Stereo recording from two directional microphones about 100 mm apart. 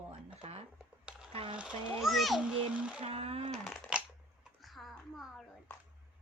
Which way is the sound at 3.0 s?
80° right.